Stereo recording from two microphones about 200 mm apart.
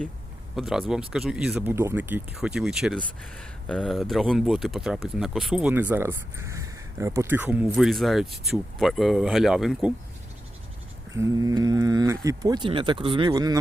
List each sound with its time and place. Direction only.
0.5 s speech: centre (ahead or behind)
11.1 s speech: 15° right (ahead or behind)